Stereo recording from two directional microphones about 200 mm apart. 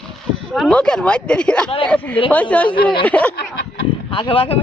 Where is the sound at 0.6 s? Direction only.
5° left (ahead or behind).